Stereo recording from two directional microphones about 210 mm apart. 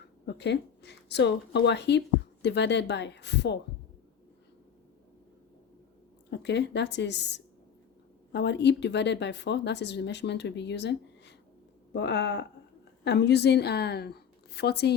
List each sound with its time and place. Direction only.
0.3 s speech: 55° left (ahead or behind)
6.3 s a woman's voice: 55° left (ahead or behind)